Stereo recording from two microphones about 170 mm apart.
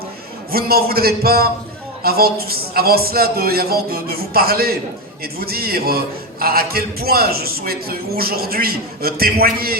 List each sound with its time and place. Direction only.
0.5 s a man's voice: 65° right (ahead or behind)